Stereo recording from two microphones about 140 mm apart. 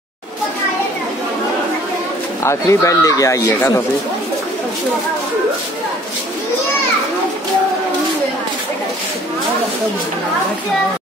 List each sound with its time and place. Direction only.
2.4 s speech: 20° left (ahead or behind)